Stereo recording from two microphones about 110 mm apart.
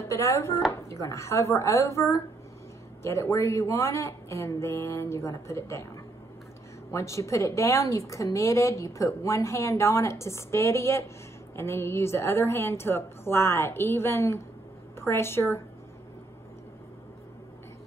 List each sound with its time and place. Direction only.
0.1 s a woman's voice: 25° left (ahead or behind)
6.9 s a woman's voice: 25° left (ahead or behind)